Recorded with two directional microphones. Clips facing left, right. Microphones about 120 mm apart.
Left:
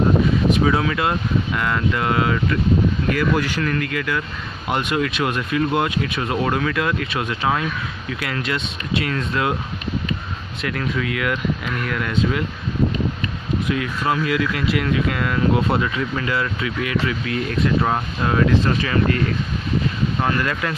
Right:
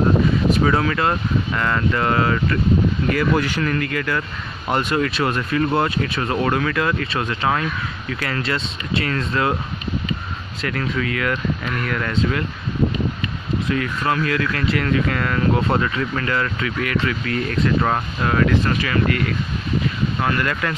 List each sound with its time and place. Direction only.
0.7 s speech: 5° left (ahead or behind)
10.6 s speech: 5° left (ahead or behind)
13.7 s speech: 15° left (ahead or behind)
20.3 s speech: 20° left (ahead or behind)